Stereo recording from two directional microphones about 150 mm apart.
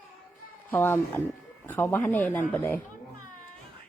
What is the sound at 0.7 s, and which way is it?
Speech, 15° left (ahead or behind).